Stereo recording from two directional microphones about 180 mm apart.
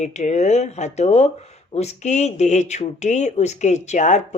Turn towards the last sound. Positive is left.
turn(degrees=40)  # may be behind; listen again after turning